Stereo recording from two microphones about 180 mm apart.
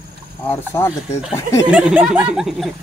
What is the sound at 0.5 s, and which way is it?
Speech, 15° left (ahead or behind).